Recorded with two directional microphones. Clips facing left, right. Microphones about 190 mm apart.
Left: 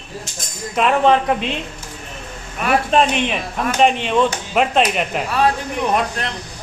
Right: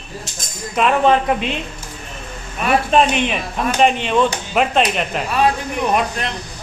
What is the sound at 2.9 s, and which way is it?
Speech, 5° right (ahead or behind).